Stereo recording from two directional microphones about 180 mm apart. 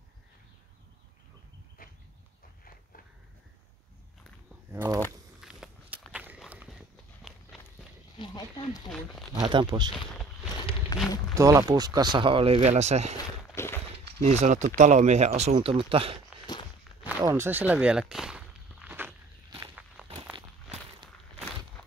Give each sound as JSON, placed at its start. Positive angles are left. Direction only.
{"t": 1.8, "sound": "a sound", "side_deg": 55}
{"t": 4.6, "sound": "a sound", "side_deg": -15}
{"t": 5.4, "sound": "walk", "side_deg": -5}
{"t": 8.2, "sound": "a sound", "side_deg": 25}
{"t": 9.3, "sound": "speech", "side_deg": -25}
{"t": 10.9, "sound": "speech", "side_deg": 20}
{"t": 11.3, "sound": "speech", "side_deg": -15}
{"t": 13.6, "sound": "walk", "side_deg": 15}
{"t": 14.2, "sound": "speech", "side_deg": -40}
{"t": 17.2, "sound": "walk", "side_deg": -15}